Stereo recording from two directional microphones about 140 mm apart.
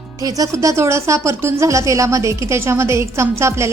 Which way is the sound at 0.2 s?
25° right (ahead or behind).